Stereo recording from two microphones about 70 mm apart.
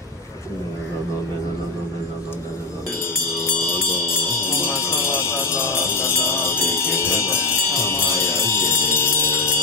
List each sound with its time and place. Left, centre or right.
3.3 s mantra: left